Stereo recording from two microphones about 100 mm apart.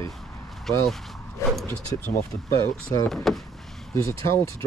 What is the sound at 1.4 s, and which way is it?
Speech, 30° left (ahead or behind).